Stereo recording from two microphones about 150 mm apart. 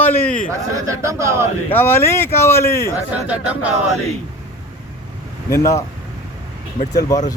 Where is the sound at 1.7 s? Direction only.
15° left (ahead or behind).